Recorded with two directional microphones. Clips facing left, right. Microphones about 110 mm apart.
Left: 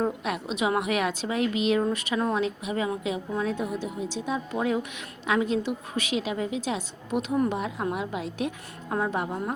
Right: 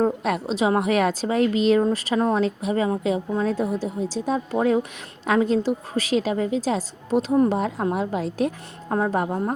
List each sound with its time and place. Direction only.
0.0 s a woman's voice: 40° right (ahead or behind)